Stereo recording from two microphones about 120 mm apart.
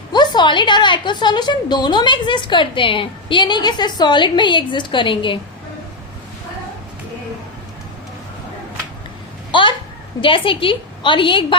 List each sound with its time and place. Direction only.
0.1 s a woman's voice: 35° left (ahead or behind)
9.5 s a sound: 45° left (ahead or behind)
10.2 s a woman's voice: 45° left (ahead or behind)